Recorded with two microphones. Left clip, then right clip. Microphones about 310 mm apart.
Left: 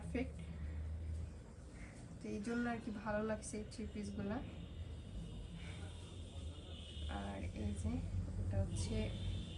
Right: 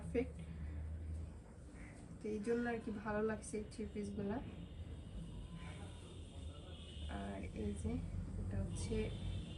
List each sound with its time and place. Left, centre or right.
0.1 s a woman's voice: centre
2.2 s a woman's voice: centre
7.1 s a sound: centre
8.7 s a woman's voice: centre